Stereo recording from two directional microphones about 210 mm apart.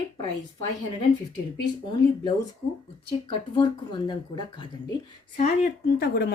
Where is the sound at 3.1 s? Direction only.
25° left (ahead or behind).